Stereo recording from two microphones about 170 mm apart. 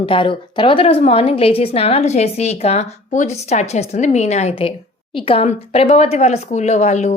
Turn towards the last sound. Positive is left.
turn(degrees=40)  # may be behind; listen again after turning